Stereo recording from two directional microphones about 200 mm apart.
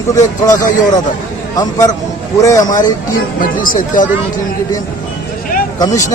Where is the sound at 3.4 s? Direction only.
45° left (ahead or behind).